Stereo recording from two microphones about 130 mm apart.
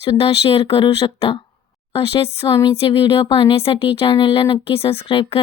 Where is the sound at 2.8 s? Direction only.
40° left (ahead or behind).